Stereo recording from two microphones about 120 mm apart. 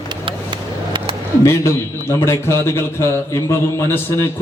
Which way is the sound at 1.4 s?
25° left (ahead or behind).